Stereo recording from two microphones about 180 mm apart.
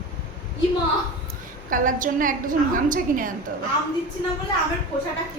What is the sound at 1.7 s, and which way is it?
A woman's voice, 50° right (ahead or behind).